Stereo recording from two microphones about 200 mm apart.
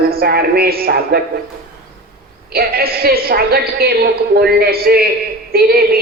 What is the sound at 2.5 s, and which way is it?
A woman's voice, 50° right (ahead or behind).